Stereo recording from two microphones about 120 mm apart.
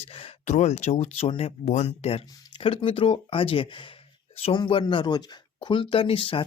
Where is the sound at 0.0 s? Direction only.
50° left (ahead or behind).